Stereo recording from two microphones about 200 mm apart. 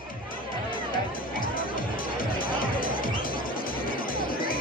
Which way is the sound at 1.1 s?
45° left (ahead or behind).